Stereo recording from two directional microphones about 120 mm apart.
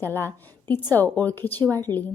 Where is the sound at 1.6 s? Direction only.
35° right (ahead or behind).